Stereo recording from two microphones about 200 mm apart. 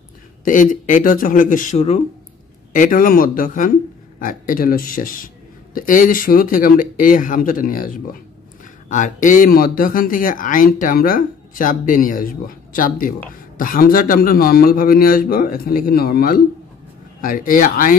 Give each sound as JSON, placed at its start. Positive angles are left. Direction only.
{"t": 0.5, "sound": "speech", "side_deg": 40}